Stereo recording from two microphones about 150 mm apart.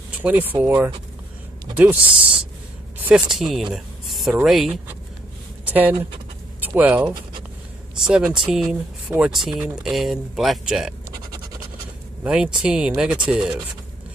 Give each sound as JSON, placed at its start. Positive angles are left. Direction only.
{"t": 0.2, "sound": "speech", "side_deg": -10}
{"t": 1.8, "sound": "speech", "side_deg": -10}
{"t": 12.2, "sound": "speech", "side_deg": -5}